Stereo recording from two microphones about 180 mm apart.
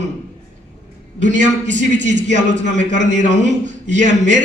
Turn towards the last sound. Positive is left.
turn(degrees=-45)  # may be behind; listen again after turning